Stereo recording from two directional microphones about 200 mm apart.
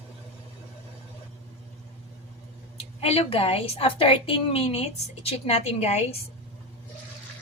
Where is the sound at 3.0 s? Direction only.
30° left (ahead or behind).